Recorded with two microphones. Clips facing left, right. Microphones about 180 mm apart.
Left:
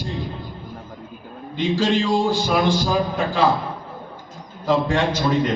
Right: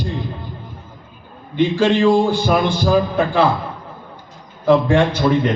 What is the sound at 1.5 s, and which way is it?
A man's voice, 60° right (ahead or behind).